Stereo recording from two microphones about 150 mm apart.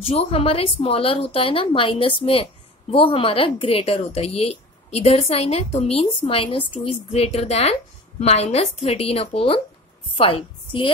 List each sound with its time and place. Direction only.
0.0 s a woman's voice: 40° left (ahead or behind)